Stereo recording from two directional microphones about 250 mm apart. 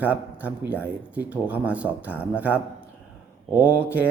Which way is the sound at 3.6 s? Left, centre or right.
Centre.